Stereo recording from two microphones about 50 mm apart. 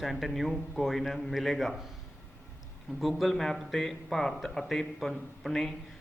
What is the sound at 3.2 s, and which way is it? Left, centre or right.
A man's voice, centre.